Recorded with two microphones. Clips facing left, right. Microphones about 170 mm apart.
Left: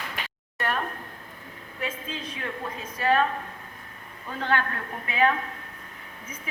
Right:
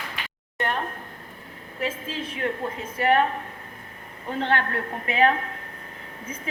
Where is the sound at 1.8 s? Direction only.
25° right (ahead or behind).